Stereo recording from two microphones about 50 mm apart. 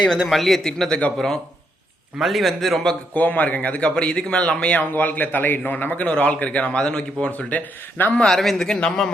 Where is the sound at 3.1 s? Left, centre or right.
Left.